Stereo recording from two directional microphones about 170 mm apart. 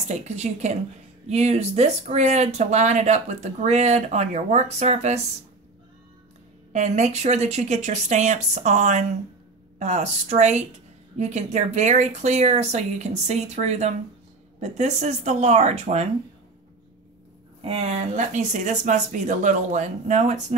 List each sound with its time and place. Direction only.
0.1 s speech: 40° right (ahead or behind)
6.7 s speech: 40° right (ahead or behind)
17.6 s speech: 35° right (ahead or behind)